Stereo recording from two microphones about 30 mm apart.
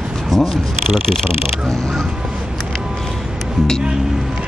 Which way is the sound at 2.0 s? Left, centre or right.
Right.